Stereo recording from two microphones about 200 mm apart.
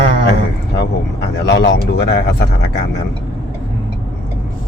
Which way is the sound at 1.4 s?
60° left (ahead or behind).